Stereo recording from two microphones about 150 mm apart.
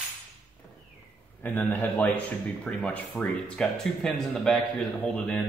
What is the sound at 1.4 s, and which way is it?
Speech, 10° left (ahead or behind).